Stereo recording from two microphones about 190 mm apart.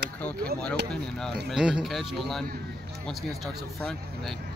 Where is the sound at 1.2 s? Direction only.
Centre (ahead or behind).